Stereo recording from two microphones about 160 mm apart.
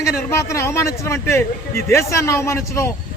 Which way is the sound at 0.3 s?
15° left (ahead or behind).